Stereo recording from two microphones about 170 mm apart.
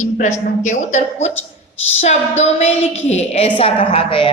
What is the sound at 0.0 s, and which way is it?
A woman's voice, 45° left (ahead or behind).